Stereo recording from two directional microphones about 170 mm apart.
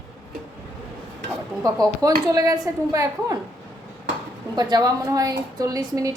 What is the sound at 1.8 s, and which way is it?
A woman's voice, 20° right (ahead or behind).